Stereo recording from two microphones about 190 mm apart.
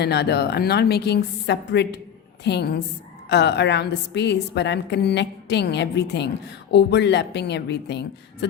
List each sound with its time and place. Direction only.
0.0 s a woman's voice: 60° left (ahead or behind)